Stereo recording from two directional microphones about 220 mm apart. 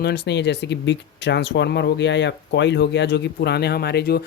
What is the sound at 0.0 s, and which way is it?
Speech, 50° left (ahead or behind).